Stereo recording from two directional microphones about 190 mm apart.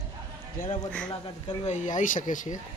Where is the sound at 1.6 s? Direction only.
40° left (ahead or behind).